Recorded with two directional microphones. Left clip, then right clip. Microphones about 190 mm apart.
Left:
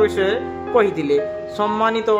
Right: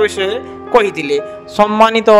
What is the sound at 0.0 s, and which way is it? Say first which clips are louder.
Speech: right 2 dB; 35° right (ahead or behind).